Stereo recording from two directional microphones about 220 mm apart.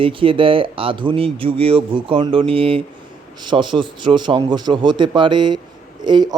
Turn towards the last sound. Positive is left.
turn(degrees=-20)  # may be behind; listen again after turning